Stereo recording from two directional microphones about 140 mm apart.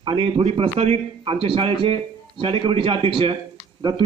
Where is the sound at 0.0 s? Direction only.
40° right (ahead or behind).